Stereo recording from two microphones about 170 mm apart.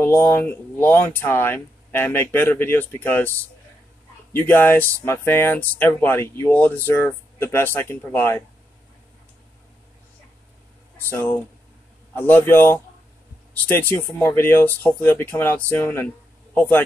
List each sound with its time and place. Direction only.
0.0 s speech: 15° left (ahead or behind)
4.3 s speech: 15° left (ahead or behind)
11.1 s a man's voice: 10° left (ahead or behind)